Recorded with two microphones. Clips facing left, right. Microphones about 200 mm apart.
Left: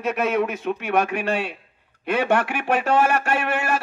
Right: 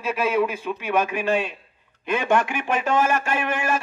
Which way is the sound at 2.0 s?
65° left (ahead or behind).